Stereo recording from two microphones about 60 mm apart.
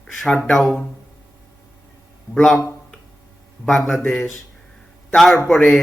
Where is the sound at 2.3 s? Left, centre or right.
Centre.